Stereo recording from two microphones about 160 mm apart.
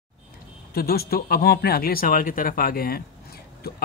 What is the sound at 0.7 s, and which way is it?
Speech, 75° left (ahead or behind).